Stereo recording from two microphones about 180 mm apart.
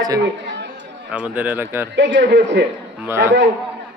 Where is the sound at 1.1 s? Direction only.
10° right (ahead or behind).